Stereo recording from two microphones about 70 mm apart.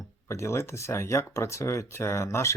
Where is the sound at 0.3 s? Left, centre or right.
Left.